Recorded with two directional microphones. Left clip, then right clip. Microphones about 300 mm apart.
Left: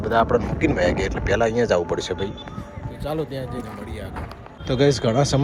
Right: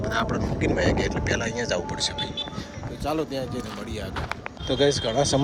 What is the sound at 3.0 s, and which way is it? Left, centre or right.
Speech, centre.